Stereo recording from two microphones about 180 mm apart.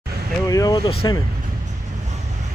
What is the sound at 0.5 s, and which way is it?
Speech, 20° left (ahead or behind).